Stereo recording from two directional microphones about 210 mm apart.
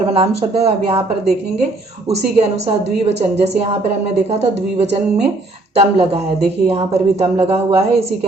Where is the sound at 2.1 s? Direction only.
30° right (ahead or behind).